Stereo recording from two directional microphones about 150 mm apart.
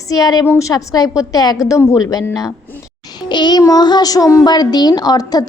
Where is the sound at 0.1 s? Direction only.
25° left (ahead or behind).